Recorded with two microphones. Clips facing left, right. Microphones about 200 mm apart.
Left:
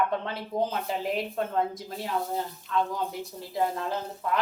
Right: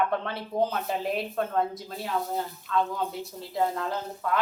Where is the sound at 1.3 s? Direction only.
20° left (ahead or behind).